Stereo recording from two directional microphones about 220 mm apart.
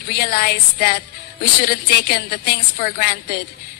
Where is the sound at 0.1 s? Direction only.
45° left (ahead or behind).